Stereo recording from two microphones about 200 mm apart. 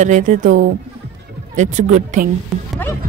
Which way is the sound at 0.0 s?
35° right (ahead or behind).